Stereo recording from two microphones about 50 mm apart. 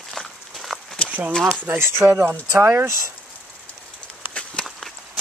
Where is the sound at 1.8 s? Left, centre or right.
Right.